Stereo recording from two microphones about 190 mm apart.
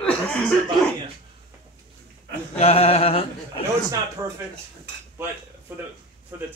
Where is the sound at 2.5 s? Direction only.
35° left (ahead or behind).